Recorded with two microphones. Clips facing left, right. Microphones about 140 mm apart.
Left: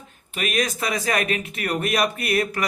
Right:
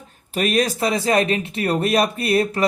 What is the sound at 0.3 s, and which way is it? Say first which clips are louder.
Speech: right 5 dB; 35° right (ahead or behind).